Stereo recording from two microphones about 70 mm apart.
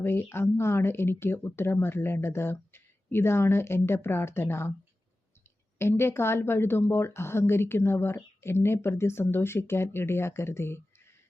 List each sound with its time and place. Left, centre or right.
0.0 s a woman's voice: left
5.8 s a woman's voice: left